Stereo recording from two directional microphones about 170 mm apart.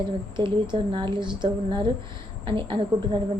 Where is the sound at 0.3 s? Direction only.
30° right (ahead or behind).